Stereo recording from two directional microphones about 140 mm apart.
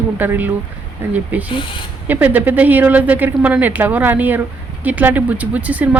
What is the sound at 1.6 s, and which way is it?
Speech, 35° left (ahead or behind).